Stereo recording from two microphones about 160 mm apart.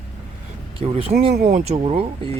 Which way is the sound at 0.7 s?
35° right (ahead or behind).